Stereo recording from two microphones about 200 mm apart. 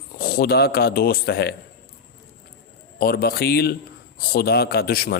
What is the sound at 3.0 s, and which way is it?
A man's voice, 50° left (ahead or behind).